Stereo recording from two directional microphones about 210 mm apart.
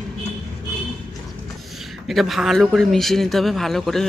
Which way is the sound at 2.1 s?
Centre (ahead or behind).